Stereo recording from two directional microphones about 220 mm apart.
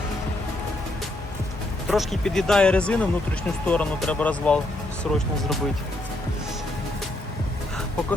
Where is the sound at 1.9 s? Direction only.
Centre (ahead or behind).